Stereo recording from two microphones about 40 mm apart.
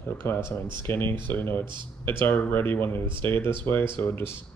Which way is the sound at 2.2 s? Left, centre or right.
Left.